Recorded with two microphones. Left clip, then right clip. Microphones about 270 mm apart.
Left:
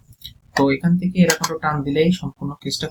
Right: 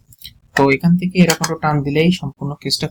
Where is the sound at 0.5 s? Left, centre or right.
Right.